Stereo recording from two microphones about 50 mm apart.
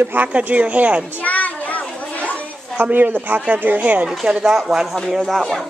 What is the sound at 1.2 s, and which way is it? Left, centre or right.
Children playing, left.